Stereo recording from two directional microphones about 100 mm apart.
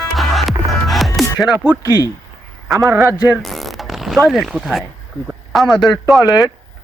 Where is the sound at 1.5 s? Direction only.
15° right (ahead or behind).